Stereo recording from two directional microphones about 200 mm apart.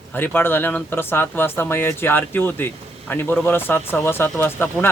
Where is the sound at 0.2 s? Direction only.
10° left (ahead or behind).